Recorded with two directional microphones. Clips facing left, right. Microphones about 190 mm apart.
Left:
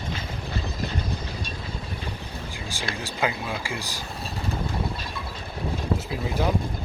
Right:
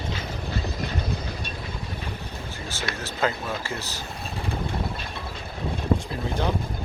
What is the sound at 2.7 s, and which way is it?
Speech, 15° left (ahead or behind).